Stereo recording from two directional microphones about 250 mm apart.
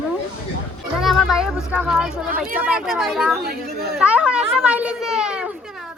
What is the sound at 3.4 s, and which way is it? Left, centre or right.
Speech, right.